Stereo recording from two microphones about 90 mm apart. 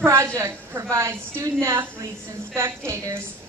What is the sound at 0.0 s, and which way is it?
A woman's voice, 30° right (ahead or behind).